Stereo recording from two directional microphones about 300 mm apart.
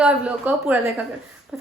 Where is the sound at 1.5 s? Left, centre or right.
Centre.